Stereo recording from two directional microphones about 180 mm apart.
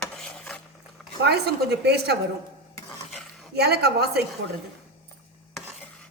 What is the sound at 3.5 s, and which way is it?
Speech, 65° right (ahead or behind).